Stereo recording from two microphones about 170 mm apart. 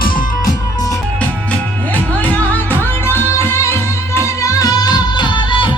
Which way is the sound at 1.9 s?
10° left (ahead or behind).